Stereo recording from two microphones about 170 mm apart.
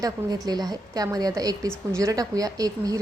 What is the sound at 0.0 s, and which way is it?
A woman's voice, 20° right (ahead or behind).